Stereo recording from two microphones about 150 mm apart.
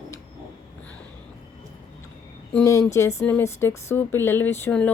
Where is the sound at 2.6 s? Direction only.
20° left (ahead or behind).